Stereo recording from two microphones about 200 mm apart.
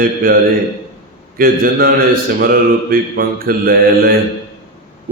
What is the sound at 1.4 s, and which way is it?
Speech, 45° right (ahead or behind).